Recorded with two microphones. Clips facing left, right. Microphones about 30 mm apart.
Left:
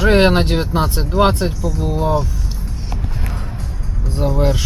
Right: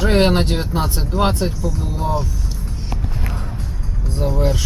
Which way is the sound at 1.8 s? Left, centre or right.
Centre.